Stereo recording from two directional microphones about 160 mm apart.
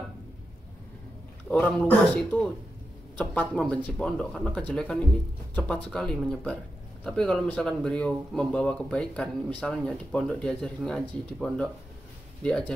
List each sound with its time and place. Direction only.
1.5 s speech: 10° left (ahead or behind)